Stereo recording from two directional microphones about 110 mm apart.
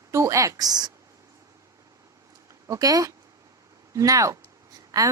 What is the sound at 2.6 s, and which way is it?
A woman's voice, 30° right (ahead or behind).